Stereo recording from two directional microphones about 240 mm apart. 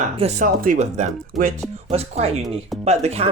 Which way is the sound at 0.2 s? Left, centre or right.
Right.